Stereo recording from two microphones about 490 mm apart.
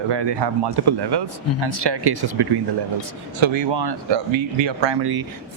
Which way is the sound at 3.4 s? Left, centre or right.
Right.